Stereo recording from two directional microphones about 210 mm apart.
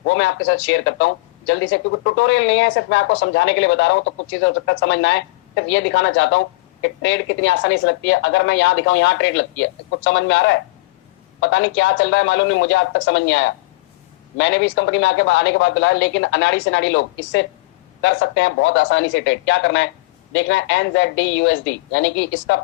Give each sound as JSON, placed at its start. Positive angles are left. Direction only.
{"t": 0.1, "sound": "speech", "side_deg": 65}